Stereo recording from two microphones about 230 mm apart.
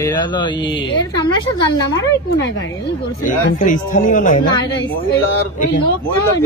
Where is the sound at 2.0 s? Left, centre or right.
Left.